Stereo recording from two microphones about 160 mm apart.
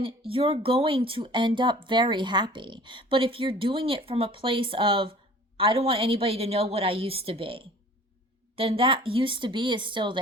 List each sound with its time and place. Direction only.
0.0 s speech: 35° right (ahead or behind)